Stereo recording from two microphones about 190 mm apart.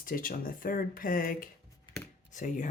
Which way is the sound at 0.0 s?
45° left (ahead or behind).